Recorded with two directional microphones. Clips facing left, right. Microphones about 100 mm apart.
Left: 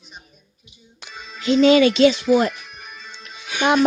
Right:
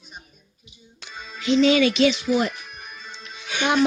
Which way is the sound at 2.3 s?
50° left (ahead or behind).